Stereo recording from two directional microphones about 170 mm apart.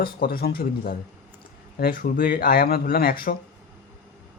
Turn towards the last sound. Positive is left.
turn(degrees=60)  # may be behind; listen again after turning